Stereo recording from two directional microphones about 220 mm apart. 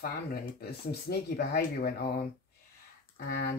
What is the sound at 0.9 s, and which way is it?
Speech, 45° left (ahead or behind).